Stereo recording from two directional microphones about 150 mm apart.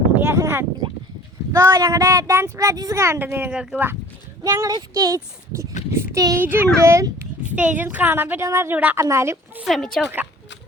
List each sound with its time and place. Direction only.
0.3 s a child's voice: 20° right (ahead or behind)
4.4 s a child's voice: 20° right (ahead or behind)
9.6 s speech: centre (ahead or behind)